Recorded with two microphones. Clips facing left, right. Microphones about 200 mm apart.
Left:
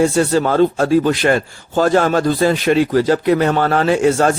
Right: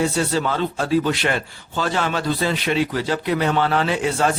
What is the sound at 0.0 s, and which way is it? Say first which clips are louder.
A man's voice: left 7 dB; 45° left (ahead or behind).